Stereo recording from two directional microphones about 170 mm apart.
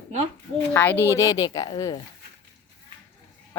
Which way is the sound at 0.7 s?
10° left (ahead or behind).